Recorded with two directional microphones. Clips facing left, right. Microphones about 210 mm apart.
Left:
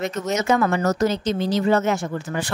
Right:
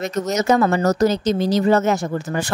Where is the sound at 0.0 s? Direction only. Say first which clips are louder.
Right 3 dB; 40° right (ahead or behind).